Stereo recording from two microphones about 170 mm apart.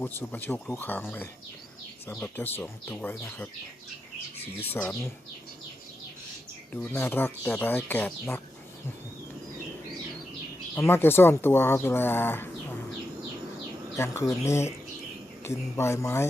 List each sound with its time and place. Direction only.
0.0 s speech: 10° left (ahead or behind)
4.7 s speech: 10° left (ahead or behind)
6.7 s speech: 10° left (ahead or behind)
10.8 s speech: 15° left (ahead or behind)
13.9 s speech: 15° left (ahead or behind)